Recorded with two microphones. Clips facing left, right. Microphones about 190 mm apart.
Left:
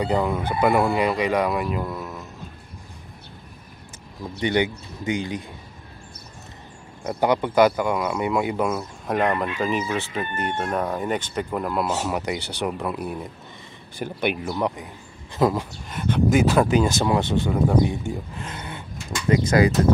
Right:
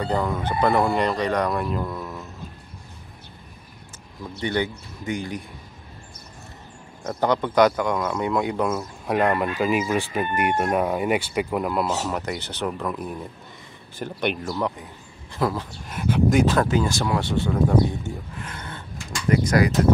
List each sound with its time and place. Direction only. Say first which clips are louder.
0.0 s speech: left 2 dB; 10° left (ahead or behind)
4.4 s speech: left 3 dB; 20° left (ahead or behind)
7.0 s speech: left 1 dB; 10° left (ahead or behind)
15.9 s speech: even; 5° right (ahead or behind); by 18.1 s 15° left (ahead or behind)
18.4 s a sound: left 2 dB; 20° left (ahead or behind)
19.4 s speech: left 3 dB; 25° left (ahead or behind)